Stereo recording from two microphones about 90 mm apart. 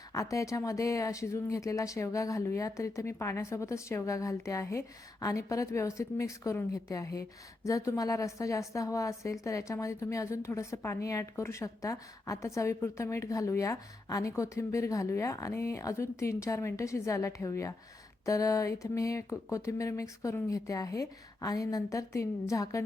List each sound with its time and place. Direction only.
0.1 s a woman's voice: 35° left (ahead or behind)